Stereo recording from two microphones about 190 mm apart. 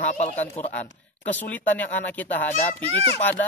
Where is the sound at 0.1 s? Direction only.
35° left (ahead or behind).